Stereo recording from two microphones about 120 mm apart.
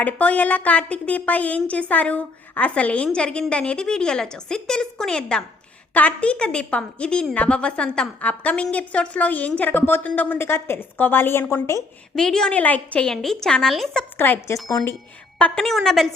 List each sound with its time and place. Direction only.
0.0 s a woman's voice: 10° left (ahead or behind)
12.1 s a woman's voice: 5° left (ahead or behind)
14.2 s speech: 20° left (ahead or behind)
15.4 s a woman's voice: 10° left (ahead or behind)